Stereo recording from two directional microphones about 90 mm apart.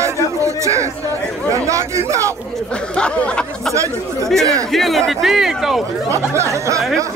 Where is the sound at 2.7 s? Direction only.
10° left (ahead or behind); by 5.8 s 5° right (ahead or behind).